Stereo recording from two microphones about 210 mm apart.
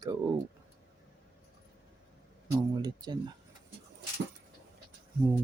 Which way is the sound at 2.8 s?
20° right (ahead or behind).